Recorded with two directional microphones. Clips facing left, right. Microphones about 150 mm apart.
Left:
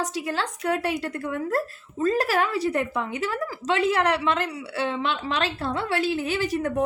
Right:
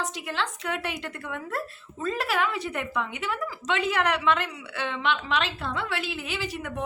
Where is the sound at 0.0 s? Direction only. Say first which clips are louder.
Left 3 dB; 40° left (ahead or behind).